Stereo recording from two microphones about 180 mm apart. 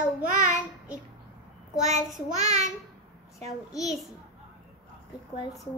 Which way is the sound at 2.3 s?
40° right (ahead or behind).